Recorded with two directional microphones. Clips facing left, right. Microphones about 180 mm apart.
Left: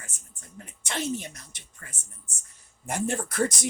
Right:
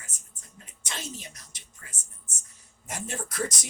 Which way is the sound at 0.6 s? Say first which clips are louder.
Left 8 dB; 60° left (ahead or behind).